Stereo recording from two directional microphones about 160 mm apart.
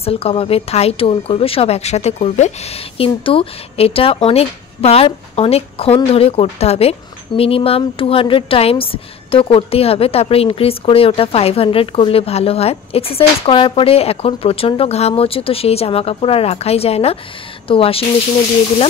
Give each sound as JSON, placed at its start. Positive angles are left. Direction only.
{"t": 0.0, "sound": "a woman's voice", "side_deg": 35}